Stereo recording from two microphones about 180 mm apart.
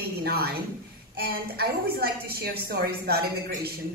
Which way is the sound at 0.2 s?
60° right (ahead or behind).